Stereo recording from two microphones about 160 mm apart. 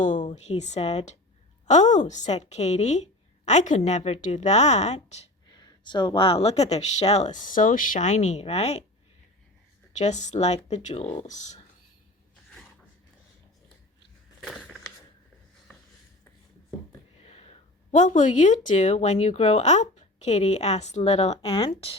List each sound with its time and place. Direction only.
0.0 s a sound: 50° left (ahead or behind)
0.3 s speech: 45° left (ahead or behind)
5.5 s speech: 25° left (ahead or behind); by 8.8 s 40° left (ahead or behind)
10.0 s speech: 45° left (ahead or behind)
14.4 s a sound: centre (ahead or behind)
17.9 s speech: 50° left (ahead or behind)